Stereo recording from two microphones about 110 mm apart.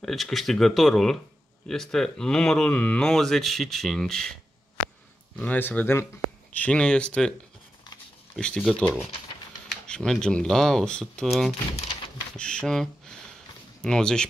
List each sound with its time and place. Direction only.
0.0 s speech: centre (ahead or behind)
5.4 s speech: 15° left (ahead or behind)
8.4 s speech: 10° left (ahead or behind)